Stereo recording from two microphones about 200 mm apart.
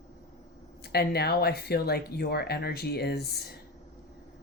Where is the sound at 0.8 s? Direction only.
55° left (ahead or behind).